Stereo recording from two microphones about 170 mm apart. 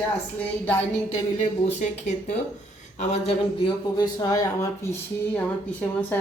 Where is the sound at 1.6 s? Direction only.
40° left (ahead or behind).